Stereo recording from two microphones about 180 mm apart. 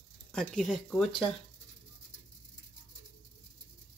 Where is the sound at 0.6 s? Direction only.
Centre (ahead or behind).